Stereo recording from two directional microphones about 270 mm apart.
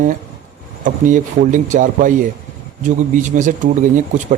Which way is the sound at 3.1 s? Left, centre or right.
Right.